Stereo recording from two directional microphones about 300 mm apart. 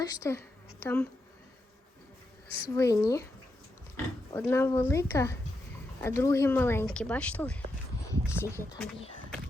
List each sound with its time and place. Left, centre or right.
0.0 s speech: centre
2.6 s speech: centre